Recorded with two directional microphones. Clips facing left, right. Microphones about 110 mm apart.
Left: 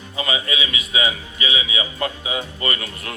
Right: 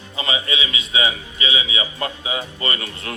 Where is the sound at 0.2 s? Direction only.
30° right (ahead or behind).